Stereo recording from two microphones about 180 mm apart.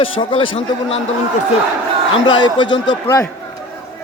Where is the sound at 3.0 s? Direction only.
15° left (ahead or behind).